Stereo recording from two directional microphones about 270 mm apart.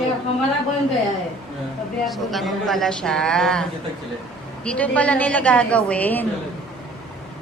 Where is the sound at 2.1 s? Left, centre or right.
Centre.